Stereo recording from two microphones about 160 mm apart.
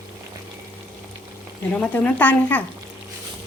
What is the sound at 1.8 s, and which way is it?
Speech, 10° left (ahead or behind).